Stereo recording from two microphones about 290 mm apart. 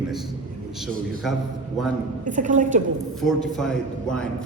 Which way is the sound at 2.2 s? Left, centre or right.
Right.